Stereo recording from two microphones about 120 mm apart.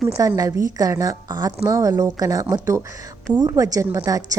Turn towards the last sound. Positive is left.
turn(degrees=-30)  # may be behind; listen again after turning